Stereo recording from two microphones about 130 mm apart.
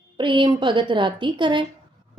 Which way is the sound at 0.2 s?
40° right (ahead or behind).